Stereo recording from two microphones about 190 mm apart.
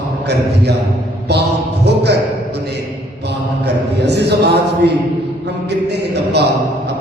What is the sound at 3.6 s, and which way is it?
Mantra, 60° right (ahead or behind).